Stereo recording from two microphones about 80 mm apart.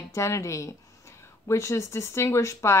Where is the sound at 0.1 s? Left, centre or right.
Left.